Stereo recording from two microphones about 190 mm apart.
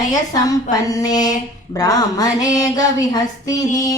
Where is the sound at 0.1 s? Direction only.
20° left (ahead or behind).